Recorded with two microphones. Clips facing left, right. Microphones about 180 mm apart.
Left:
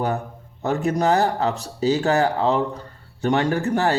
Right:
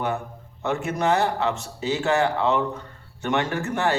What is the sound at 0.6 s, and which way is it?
A man's voice, 35° left (ahead or behind).